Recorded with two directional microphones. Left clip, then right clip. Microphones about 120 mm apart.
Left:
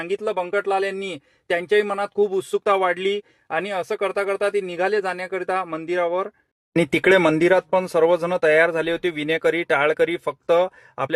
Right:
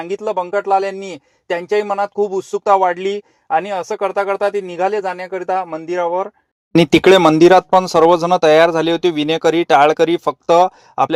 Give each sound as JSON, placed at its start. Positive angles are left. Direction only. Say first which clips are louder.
{"t": 0.0, "sound": "speech", "louder": "right 4 dB", "side_deg": 5}
{"t": 6.9, "sound": "speech", "louder": "right 6 dB", "side_deg": -35}